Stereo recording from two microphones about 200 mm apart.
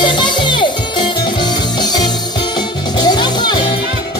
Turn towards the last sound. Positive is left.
turn(degrees=20)  # may be behind; listen again after turning